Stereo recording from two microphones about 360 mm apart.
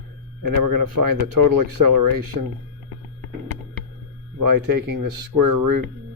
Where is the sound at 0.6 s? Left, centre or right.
Right.